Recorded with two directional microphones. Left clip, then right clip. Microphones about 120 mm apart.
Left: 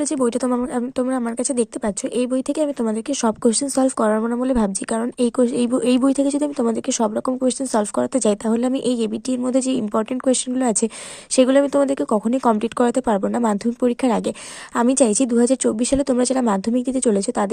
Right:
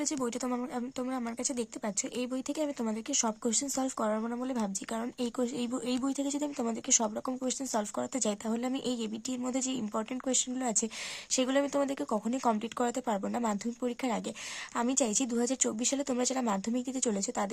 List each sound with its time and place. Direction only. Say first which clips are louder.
0.4 s a woman's voice: left 13 dB; 40° left (ahead or behind)